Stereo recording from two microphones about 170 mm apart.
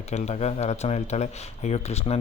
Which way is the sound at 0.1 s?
40° left (ahead or behind).